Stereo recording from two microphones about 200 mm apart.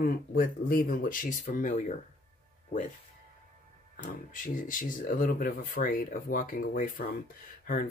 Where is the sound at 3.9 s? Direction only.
40° left (ahead or behind).